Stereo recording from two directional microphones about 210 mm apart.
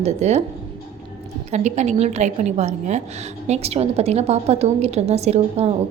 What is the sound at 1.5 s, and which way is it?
A woman's voice, 35° right (ahead or behind).